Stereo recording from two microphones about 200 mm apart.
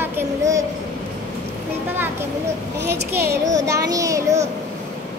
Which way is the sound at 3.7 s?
15° right (ahead or behind).